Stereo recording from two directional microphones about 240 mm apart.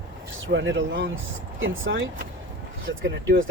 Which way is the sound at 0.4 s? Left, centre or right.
Right.